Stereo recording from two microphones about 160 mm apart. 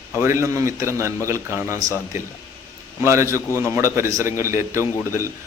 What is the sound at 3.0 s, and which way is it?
A man's voice, 20° right (ahead or behind).